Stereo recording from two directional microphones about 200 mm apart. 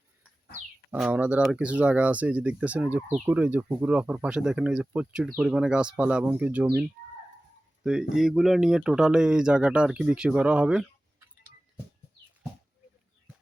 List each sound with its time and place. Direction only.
0.9 s speech: 5° right (ahead or behind)
8.1 s speech: centre (ahead or behind)